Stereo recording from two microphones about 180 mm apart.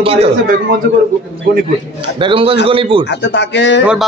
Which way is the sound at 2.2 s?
30° right (ahead or behind).